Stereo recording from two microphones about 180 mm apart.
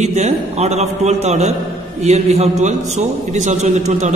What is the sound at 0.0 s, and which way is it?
A man's voice, 40° right (ahead or behind).